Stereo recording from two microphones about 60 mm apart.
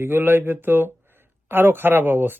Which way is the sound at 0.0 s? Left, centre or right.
Right.